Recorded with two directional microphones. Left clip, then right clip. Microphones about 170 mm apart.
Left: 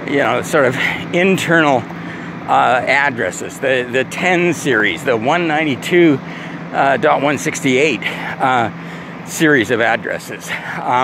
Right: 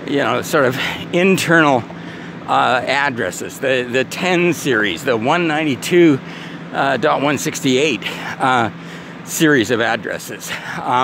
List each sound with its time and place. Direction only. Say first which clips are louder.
0.1 s speech: left 2 dB; 40° right (ahead or behind)